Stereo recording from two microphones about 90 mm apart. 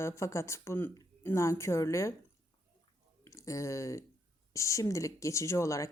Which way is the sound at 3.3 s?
35° left (ahead or behind).